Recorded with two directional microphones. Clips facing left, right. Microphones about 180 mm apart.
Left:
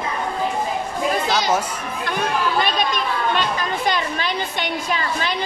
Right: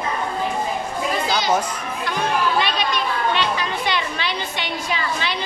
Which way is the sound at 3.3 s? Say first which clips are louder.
Even; 45° left (ahead or behind).